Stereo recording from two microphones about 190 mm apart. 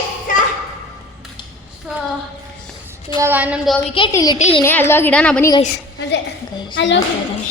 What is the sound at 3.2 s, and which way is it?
Speech, 10° right (ahead or behind).